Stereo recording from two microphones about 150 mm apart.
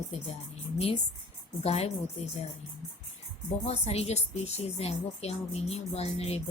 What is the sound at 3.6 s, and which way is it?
A woman's voice, 45° left (ahead or behind).